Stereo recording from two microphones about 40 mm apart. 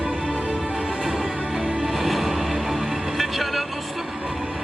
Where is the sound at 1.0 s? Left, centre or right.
Centre.